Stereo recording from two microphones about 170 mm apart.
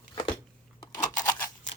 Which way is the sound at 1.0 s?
50° left (ahead or behind).